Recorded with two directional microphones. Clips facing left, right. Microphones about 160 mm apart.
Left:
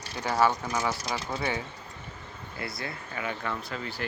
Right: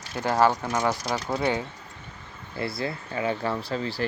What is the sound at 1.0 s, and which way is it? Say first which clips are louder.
Speech: right 5 dB; 30° right (ahead or behind).